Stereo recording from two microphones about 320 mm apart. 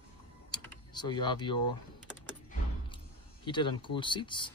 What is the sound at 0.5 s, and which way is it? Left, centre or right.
Typing, centre.